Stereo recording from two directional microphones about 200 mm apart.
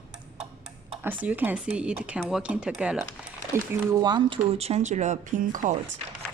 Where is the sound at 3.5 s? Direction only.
15° right (ahead or behind); by 5.8 s 40° right (ahead or behind).